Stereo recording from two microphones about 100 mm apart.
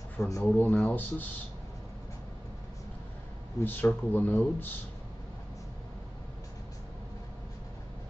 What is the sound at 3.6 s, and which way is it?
Speech, 15° left (ahead or behind).